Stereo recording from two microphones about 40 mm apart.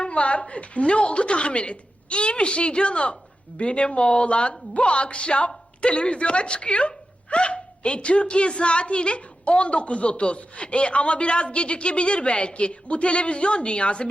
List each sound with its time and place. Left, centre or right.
0.0 s speech: left